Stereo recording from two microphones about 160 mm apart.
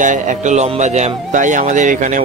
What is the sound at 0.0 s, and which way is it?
Speech, 50° right (ahead or behind).